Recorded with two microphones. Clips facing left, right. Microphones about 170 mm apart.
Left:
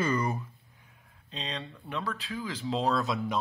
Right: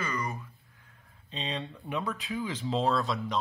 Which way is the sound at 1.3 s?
5° right (ahead or behind).